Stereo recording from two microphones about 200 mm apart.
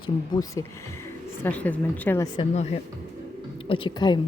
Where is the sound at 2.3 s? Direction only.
30° left (ahead or behind).